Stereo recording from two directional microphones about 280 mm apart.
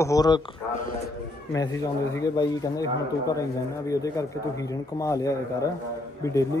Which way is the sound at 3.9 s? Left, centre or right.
Centre.